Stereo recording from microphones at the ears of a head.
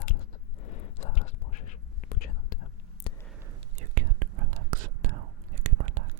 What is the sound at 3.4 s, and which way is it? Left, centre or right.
Whispering, right.